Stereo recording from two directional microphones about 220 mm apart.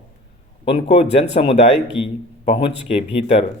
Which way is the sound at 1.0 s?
30° left (ahead or behind).